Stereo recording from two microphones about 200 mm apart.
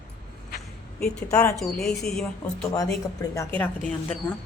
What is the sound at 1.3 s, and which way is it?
Speech, 15° left (ahead or behind).